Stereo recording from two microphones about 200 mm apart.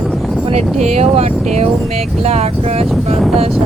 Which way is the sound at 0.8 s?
35° right (ahead or behind).